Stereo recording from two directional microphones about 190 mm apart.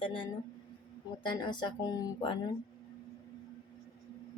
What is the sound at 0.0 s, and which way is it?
Speech, 25° left (ahead or behind).